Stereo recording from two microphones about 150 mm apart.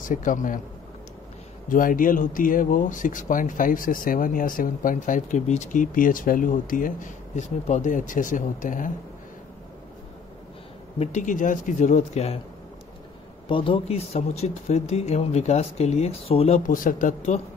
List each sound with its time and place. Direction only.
0.0 s speech: 60° left (ahead or behind)
1.7 s speech: 65° left (ahead or behind)
11.0 s speech: 55° left (ahead or behind)
13.5 s speech: 35° left (ahead or behind)
16.6 s speech: 65° left (ahead or behind)